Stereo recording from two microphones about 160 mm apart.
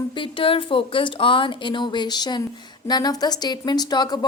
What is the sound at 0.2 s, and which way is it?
A woman's voice, 35° left (ahead or behind).